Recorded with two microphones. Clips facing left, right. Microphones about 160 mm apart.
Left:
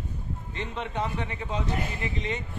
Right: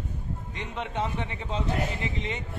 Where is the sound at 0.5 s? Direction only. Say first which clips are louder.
Left 1 dB; 20° right (ahead or behind).